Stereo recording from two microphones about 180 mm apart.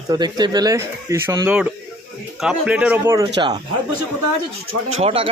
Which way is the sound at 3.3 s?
25° right (ahead or behind).